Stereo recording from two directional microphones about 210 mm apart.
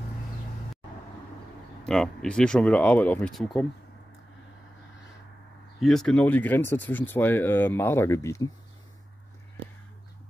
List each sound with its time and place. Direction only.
1.9 s speech: 5° left (ahead or behind)
5.8 s speech: centre (ahead or behind)